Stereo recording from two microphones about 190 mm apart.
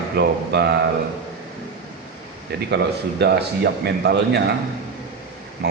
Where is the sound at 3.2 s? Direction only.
60° right (ahead or behind).